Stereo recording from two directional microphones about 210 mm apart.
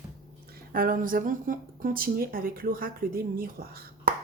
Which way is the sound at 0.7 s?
45° right (ahead or behind).